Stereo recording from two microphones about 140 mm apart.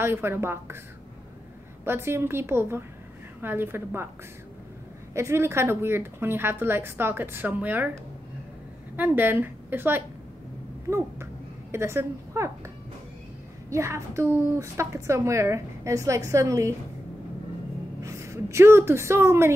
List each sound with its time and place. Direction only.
0.0 s a woman's voice: 15° right (ahead or behind)
1.9 s a woman's voice: 20° right (ahead or behind)
5.1 s a woman's voice: 20° right (ahead or behind)
11.7 s a woman's voice: 20° right (ahead or behind)
18.0 s a woman's voice: 20° right (ahead or behind)